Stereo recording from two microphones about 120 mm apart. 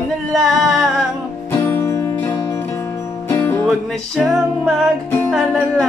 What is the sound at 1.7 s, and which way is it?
Music, 25° left (ahead or behind).